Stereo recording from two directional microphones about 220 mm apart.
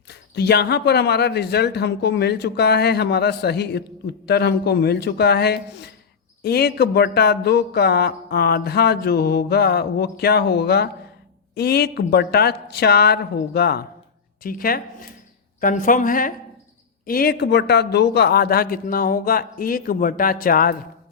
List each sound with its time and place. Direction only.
0.1 s a man's voice: 50° left (ahead or behind)